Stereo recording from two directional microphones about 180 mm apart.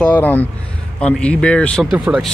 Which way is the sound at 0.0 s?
10° left (ahead or behind).